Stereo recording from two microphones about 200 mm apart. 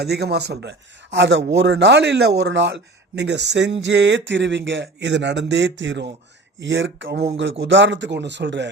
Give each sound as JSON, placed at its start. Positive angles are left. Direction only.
{"t": 0.0, "sound": "a man's voice", "side_deg": -55}